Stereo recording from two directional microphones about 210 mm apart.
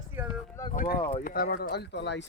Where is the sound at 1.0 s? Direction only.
25° left (ahead or behind).